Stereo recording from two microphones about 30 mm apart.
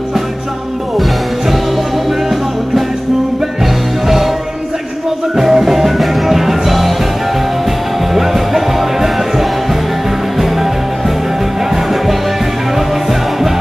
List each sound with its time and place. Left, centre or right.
5.3 s music: centre
8.1 s music: centre
11.7 s music: centre